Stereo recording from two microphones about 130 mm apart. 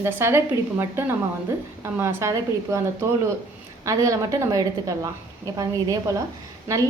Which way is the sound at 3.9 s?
25° right (ahead or behind).